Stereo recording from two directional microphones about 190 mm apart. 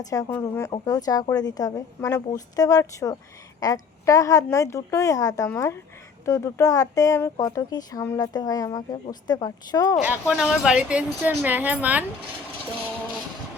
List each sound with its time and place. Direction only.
0.0 s a woman's voice: 20° left (ahead or behind)
9.9 s speech: 5° right (ahead or behind)